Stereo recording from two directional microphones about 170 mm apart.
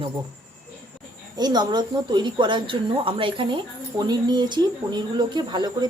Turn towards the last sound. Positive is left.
turn(degrees=-25)  # may be behind; listen again after turning